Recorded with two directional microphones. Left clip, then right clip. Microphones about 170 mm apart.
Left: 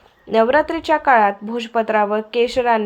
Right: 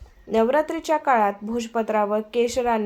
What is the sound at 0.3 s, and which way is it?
A woman's voice, 25° left (ahead or behind).